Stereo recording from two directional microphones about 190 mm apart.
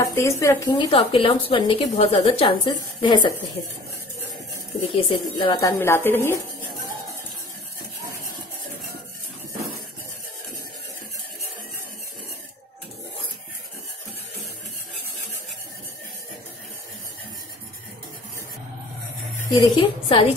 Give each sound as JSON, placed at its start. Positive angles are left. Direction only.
{"t": 0.0, "sound": "a woman's voice", "side_deg": 15}
{"t": 4.9, "sound": "a woman's voice", "side_deg": 25}
{"t": 19.5, "sound": "a woman's voice", "side_deg": 25}